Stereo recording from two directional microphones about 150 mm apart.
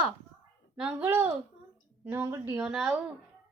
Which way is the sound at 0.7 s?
10° right (ahead or behind).